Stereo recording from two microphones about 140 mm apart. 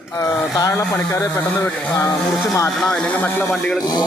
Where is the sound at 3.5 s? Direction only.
Centre (ahead or behind).